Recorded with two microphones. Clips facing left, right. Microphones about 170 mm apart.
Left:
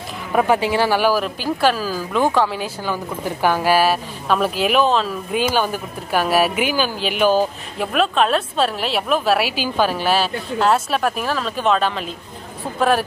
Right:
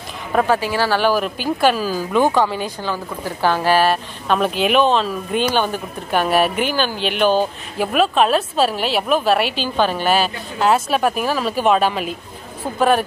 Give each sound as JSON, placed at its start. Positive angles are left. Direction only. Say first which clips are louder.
{"t": 0.3, "sound": "speech", "louder": "even", "side_deg": 10}
{"t": 0.6, "sound": "speech", "louder": "left 1 dB", "side_deg": 20}
{"t": 1.2, "sound": "speech", "louder": "right 1 dB", "side_deg": 0}